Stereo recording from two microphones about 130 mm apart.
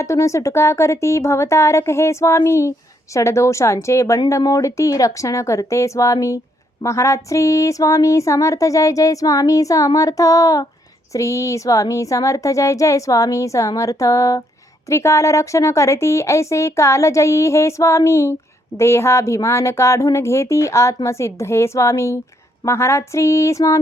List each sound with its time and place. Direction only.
0.0 s speech: 25° left (ahead or behind)